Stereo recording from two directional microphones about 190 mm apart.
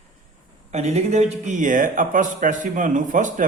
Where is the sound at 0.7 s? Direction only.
35° right (ahead or behind).